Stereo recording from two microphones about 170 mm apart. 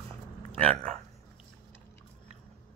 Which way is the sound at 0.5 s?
40° right (ahead or behind).